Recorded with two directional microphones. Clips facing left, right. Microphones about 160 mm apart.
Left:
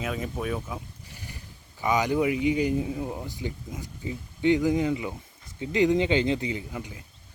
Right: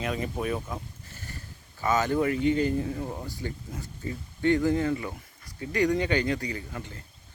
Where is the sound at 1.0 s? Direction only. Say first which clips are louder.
Even; 15° left (ahead or behind).